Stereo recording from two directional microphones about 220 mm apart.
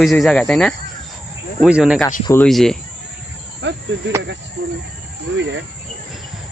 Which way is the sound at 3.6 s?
55° right (ahead or behind).